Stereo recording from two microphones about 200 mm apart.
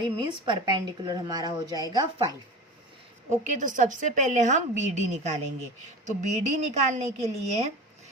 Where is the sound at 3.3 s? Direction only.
35° right (ahead or behind).